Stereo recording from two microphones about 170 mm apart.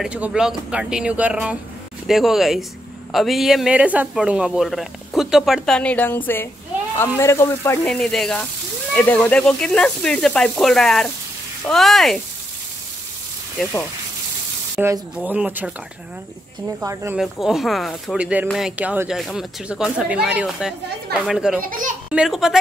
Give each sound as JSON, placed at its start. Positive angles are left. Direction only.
{"t": 0.0, "sound": "a man's voice", "side_deg": -5}
{"t": 7.8, "sound": "a man's voice", "side_deg": 5}
{"t": 13.6, "sound": "a man's voice", "side_deg": 5}
{"t": 14.8, "sound": "speech", "side_deg": -10}
{"t": 16.8, "sound": "speech", "side_deg": -15}
{"t": 17.2, "sound": "a man's voice", "side_deg": 0}
{"t": 21.6, "sound": "a child's voice", "side_deg": -50}
{"t": 22.1, "sound": "a man's voice", "side_deg": -5}